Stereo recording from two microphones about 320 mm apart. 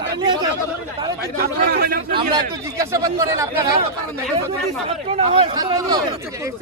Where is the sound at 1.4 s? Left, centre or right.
Right.